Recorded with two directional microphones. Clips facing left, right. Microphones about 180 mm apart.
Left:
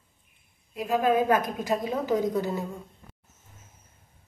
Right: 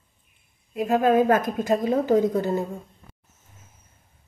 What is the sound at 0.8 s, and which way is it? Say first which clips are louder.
A woman's voice: right 4 dB; 50° right (ahead or behind).